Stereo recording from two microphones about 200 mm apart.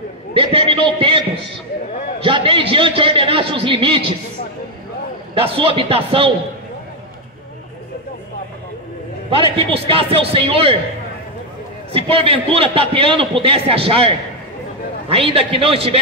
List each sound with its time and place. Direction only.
0.3 s a man's voice: 25° right (ahead or behind)
5.3 s a man's voice: 25° right (ahead or behind)
9.3 s a man's voice: 25° right (ahead or behind)
11.9 s a man's voice: 30° right (ahead or behind)